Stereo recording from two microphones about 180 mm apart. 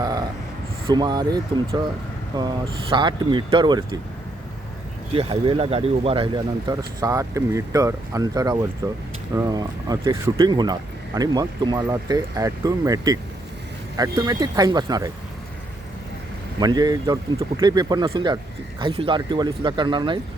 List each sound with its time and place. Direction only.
0.0 s a sound: 20° right (ahead or behind)
0.9 s speech: 25° right (ahead or behind)
5.1 s speech: 30° right (ahead or behind)
16.6 s speech: 20° right (ahead or behind)